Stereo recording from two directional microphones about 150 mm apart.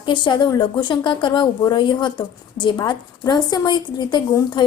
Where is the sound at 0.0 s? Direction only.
30° left (ahead or behind).